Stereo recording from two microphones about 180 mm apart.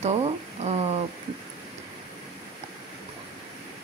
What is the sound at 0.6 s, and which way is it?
Speech, 40° right (ahead or behind).